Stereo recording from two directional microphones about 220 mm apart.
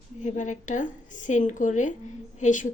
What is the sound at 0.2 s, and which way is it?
Speech, 35° left (ahead or behind).